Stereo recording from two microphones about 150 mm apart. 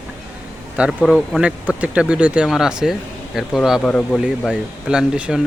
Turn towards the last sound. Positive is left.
turn(degrees=-5)  # may be behind; listen again after turning